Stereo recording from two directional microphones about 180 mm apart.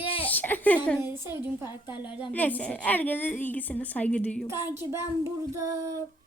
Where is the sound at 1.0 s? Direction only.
10° right (ahead or behind).